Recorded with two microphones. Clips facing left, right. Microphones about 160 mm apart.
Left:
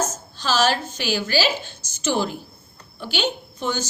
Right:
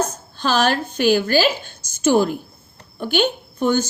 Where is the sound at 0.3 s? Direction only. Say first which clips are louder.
Right 2 dB; 55° right (ahead or behind).